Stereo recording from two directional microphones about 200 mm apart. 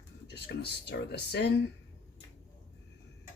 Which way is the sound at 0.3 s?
55° left (ahead or behind).